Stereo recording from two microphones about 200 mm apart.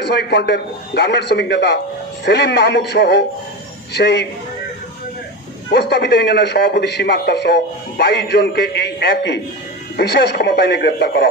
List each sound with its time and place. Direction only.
0.0 s a man's voice: 60° left (ahead or behind)
5.7 s a man's voice: 55° left (ahead or behind)